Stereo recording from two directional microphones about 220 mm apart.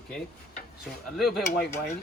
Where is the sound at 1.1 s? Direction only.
Centre (ahead or behind).